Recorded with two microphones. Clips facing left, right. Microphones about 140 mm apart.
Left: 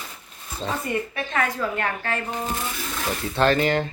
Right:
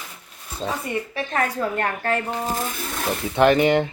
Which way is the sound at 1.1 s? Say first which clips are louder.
Right 2 dB; 35° right (ahead or behind).